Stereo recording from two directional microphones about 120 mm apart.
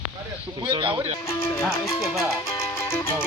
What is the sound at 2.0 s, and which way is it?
Music, centre (ahead or behind).